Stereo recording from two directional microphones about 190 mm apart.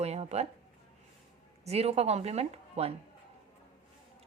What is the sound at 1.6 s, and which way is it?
A woman's voice, 35° right (ahead or behind).